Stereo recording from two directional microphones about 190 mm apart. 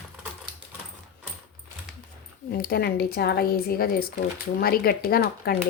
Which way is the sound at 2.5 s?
55° left (ahead or behind).